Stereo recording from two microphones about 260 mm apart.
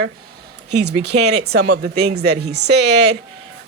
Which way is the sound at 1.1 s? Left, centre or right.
Right.